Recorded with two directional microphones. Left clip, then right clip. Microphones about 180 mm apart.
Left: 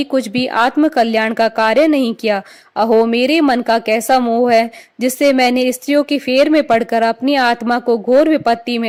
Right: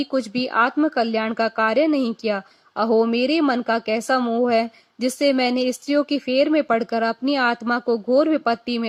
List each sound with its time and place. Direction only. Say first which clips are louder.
0.0 s a woman's voice: left 7 dB; 30° left (ahead or behind)